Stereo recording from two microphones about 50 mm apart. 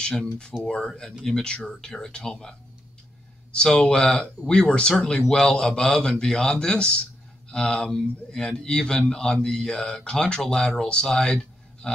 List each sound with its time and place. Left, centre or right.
0.0 s speech: centre
3.5 s speech: centre